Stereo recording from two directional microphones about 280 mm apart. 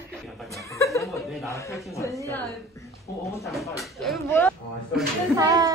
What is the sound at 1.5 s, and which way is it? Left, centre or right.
Speech, centre.